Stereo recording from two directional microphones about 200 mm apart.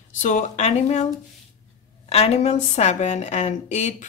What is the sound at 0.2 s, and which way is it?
Speech, 40° left (ahead or behind).